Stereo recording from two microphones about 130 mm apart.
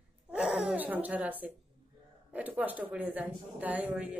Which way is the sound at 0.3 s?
5° right (ahead or behind).